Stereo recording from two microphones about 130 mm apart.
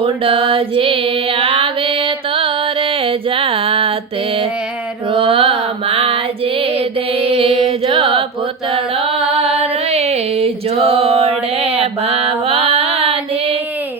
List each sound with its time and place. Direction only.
0.0 s music: 45° right (ahead or behind)
5.1 s music: 45° right (ahead or behind)
9.4 s music: 55° right (ahead or behind)